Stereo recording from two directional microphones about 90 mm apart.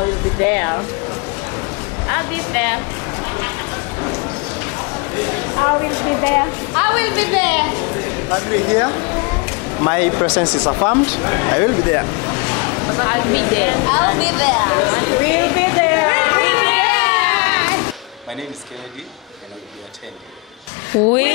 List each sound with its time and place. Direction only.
0.0 s music: 20° left (ahead or behind)
2.0 s speech: 20° left (ahead or behind)
10.7 s vehicle: 20° left (ahead or behind)
20.9 s speech: 15° left (ahead or behind)